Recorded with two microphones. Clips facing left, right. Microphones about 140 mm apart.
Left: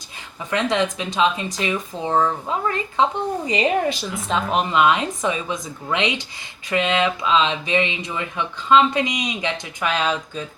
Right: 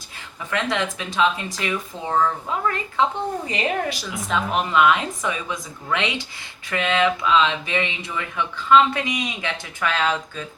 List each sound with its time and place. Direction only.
0.5 s speech: 20° left (ahead or behind)